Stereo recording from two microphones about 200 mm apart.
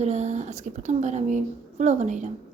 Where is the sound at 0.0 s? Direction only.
35° right (ahead or behind).